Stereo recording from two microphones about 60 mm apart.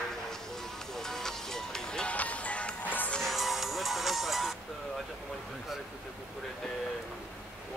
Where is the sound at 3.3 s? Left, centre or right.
Centre.